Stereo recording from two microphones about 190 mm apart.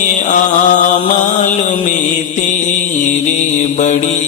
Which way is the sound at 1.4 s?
40° left (ahead or behind).